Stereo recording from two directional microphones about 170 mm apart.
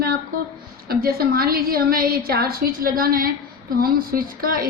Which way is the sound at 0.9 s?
60° right (ahead or behind).